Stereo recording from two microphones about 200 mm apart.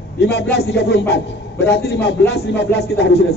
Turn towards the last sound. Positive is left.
turn(degrees=60)  # may be behind; listen again after turning